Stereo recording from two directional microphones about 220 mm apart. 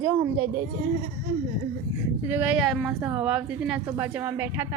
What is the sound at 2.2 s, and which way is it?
A woman's voice, 10° right (ahead or behind).